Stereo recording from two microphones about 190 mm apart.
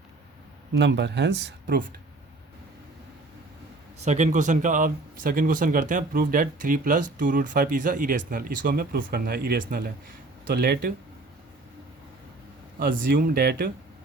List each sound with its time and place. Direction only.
0.7 s speech: 70° right (ahead or behind)
4.0 s speech: 40° right (ahead or behind)
12.8 s speech: 50° right (ahead or behind)